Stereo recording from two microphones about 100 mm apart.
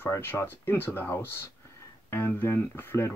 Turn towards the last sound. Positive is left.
turn(degrees=25)  # may be behind; listen again after turning